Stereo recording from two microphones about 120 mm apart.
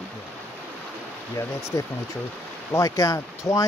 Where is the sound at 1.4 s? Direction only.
25° left (ahead or behind).